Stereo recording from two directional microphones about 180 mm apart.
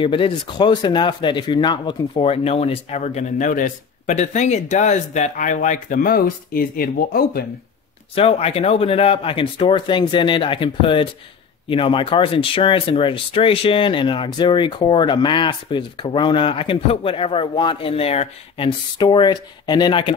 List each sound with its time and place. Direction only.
0.0 s speech: 30° left (ahead or behind); by 7.4 s 55° left (ahead or behind)
8.1 s speech: 30° left (ahead or behind)